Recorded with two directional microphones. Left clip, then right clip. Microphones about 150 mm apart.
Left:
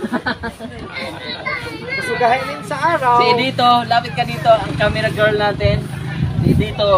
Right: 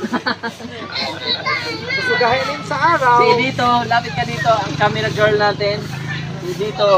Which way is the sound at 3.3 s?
45° left (ahead or behind).